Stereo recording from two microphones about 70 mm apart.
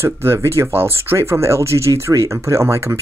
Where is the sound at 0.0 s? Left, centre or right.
Right.